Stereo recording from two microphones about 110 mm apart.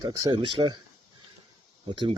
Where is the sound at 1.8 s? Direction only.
60° right (ahead or behind).